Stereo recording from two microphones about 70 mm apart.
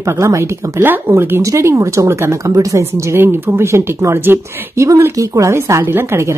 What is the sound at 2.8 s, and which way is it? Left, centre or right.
A woman's voice, right.